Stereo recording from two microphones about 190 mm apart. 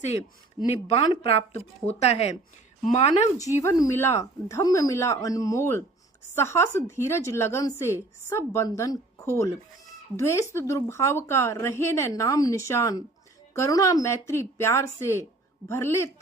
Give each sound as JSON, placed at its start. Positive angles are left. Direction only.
{"t": 0.7, "sound": "speech", "side_deg": 30}
{"t": 3.6, "sound": "a woman's voice", "side_deg": 15}